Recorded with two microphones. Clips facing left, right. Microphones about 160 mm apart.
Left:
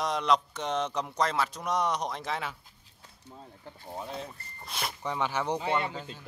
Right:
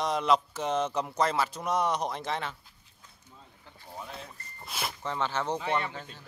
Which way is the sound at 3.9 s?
30° left (ahead or behind).